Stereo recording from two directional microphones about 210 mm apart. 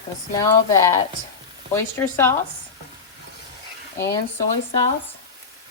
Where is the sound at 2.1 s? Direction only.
10° left (ahead or behind).